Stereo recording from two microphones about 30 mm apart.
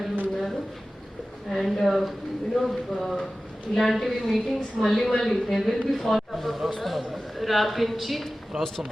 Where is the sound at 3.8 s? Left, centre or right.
Centre.